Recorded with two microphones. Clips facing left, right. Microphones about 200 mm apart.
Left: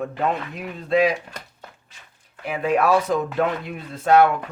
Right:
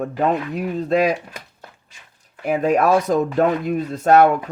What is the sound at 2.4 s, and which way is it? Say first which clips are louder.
Speech: right 3 dB; 45° right (ahead or behind).